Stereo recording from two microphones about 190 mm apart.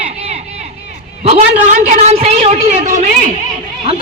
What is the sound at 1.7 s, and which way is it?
A woman's voice, 35° right (ahead or behind).